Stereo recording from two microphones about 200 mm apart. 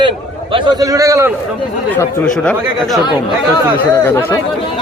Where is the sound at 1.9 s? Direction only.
5° left (ahead or behind).